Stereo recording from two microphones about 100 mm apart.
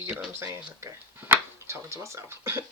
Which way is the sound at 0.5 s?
25° right (ahead or behind).